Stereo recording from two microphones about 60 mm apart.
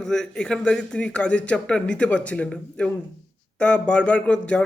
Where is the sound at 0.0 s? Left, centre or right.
Centre.